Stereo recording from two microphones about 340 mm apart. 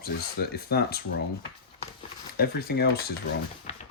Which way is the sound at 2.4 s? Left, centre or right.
Left.